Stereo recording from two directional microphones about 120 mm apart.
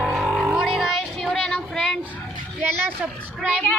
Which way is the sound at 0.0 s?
5° right (ahead or behind).